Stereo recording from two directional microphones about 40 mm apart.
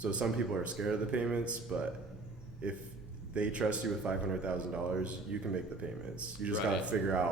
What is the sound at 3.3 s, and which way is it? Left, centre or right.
A man's voice, right.